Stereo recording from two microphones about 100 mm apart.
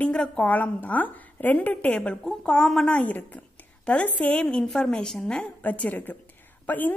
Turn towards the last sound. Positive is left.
turn(degrees=15)  # may be behind; listen again after turning